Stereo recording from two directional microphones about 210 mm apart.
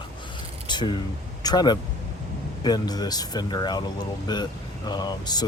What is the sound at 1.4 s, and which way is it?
Speech, 20° left (ahead or behind).